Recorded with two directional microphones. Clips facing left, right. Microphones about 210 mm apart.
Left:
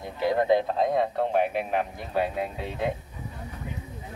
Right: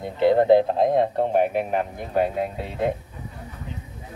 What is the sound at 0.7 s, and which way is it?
Speech, 50° right (ahead or behind).